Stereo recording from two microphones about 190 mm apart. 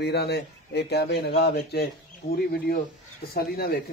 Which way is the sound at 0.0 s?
60° left (ahead or behind).